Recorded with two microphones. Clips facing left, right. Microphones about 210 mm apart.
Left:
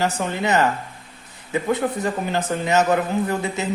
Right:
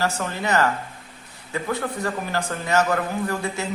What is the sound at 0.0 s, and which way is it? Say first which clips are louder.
Speech: left 3 dB; 20° left (ahead or behind).